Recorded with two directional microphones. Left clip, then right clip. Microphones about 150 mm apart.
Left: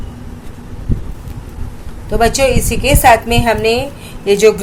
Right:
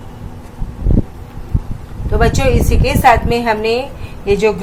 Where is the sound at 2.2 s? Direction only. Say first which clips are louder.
Left 3 dB; 25° left (ahead or behind).